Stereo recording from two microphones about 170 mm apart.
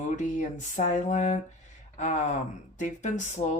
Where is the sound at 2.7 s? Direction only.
45° left (ahead or behind).